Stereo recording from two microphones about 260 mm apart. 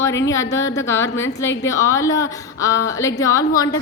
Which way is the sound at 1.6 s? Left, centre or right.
Centre.